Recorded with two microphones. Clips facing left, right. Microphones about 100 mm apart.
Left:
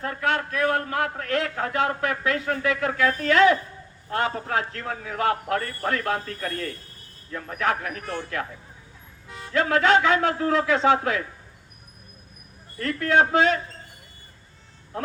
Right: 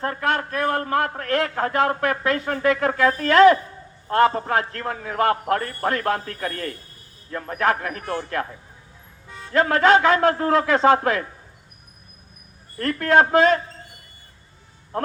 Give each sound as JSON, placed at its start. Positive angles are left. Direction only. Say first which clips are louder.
{"t": 0.0, "sound": "a man's voice", "louder": "right 2 dB", "side_deg": -45}
{"t": 7.3, "sound": "a man's voice", "louder": "right 4 dB", "side_deg": -50}
{"t": 9.5, "sound": "a man's voice", "louder": "right 3 dB", "side_deg": -45}
{"t": 12.8, "sound": "a man's voice", "louder": "right 3 dB", "side_deg": -50}